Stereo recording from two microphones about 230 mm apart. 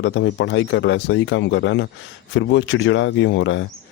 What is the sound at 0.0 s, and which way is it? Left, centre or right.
Speech, left.